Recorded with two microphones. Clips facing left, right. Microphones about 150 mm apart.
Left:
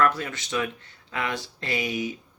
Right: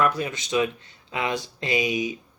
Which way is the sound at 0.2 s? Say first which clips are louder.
Right 5 dB; 15° right (ahead or behind).